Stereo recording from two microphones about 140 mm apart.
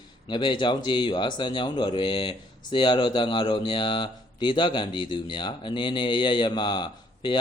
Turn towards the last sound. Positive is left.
turn(degrees=35)  # may be behind; listen again after turning